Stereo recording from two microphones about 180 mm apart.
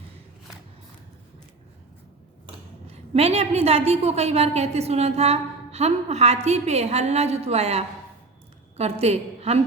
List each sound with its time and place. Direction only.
2.8 s a woman's voice: 35° right (ahead or behind)